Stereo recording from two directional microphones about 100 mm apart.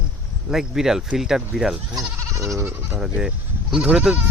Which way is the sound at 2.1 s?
30° right (ahead or behind).